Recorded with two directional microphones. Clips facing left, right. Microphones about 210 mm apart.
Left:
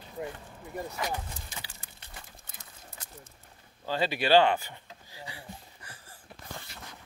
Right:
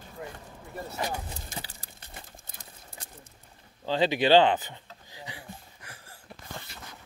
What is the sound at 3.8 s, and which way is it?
Speech, 20° right (ahead or behind).